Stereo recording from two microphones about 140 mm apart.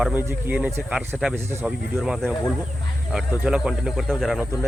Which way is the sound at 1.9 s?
Centre (ahead or behind).